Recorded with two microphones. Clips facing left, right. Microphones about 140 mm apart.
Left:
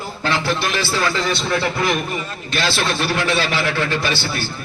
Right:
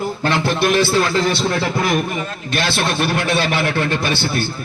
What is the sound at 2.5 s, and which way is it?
A man's voice, 55° right (ahead or behind).